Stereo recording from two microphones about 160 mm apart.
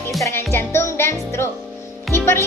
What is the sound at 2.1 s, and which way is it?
Music, 15° left (ahead or behind).